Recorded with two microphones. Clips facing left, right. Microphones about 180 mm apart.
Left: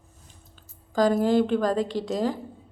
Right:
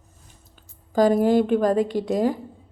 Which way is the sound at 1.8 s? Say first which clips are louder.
Right 4 dB; 50° right (ahead or behind).